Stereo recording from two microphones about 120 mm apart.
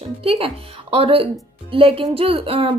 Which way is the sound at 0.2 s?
50° right (ahead or behind).